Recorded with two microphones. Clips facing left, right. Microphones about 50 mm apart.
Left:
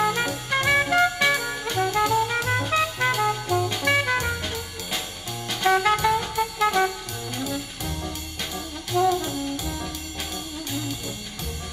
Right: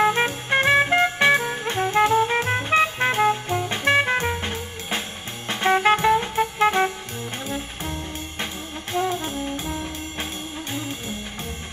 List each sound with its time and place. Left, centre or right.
0.0 s music: right
8.9 s brass instrument: right
10.7 s music: right